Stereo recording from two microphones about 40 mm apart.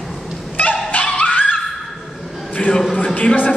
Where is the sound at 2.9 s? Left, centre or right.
Left.